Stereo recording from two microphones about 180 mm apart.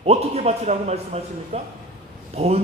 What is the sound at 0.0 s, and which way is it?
A man's voice, 35° right (ahead or behind).